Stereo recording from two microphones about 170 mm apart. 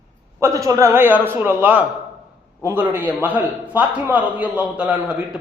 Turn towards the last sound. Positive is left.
turn(degrees=-10)  # may be behind; listen again after turning